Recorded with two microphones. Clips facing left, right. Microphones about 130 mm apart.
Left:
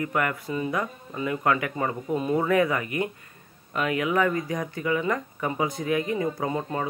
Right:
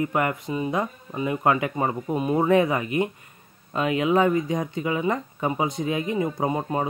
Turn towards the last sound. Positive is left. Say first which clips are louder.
# right 3 dB
turn(degrees=-20)  # may be behind; listen again after turning